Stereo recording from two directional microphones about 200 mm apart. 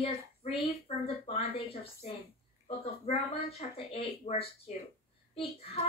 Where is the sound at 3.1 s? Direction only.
30° left (ahead or behind).